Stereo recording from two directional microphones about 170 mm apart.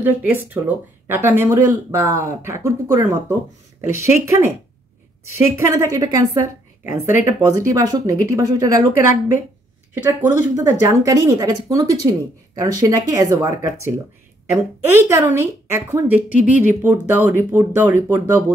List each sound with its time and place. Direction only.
0.0 s a woman's voice: 10° right (ahead or behind)
10.2 s a woman's voice: 15° right (ahead or behind)